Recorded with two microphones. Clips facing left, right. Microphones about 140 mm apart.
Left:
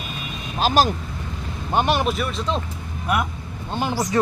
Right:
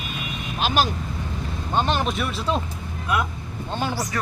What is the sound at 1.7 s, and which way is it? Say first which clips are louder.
Speech: left 3 dB; 10° left (ahead or behind).